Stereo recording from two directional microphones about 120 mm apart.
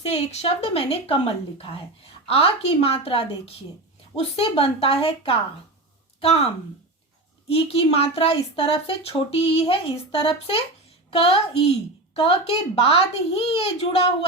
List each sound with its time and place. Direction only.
0.0 s a woman's voice: 60° left (ahead or behind)